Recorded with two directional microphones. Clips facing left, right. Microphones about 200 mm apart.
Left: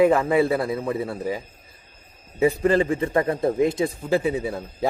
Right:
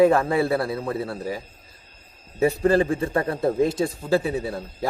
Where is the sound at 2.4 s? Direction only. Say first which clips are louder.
Even; 15° left (ahead or behind).